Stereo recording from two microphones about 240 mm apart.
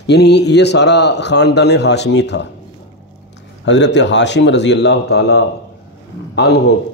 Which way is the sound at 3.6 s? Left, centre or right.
Left.